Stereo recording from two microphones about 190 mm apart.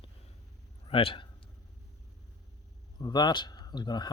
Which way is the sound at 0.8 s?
30° left (ahead or behind).